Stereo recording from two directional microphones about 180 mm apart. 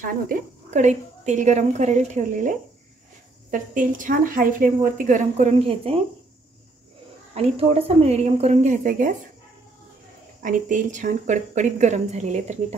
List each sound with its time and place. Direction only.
0.0 s a woman's voice: 45° right (ahead or behind)
7.3 s speech: 35° right (ahead or behind)
10.4 s a woman's voice: 45° right (ahead or behind)